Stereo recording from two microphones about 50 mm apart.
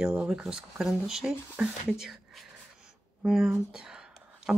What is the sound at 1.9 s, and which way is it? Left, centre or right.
Whispering, centre.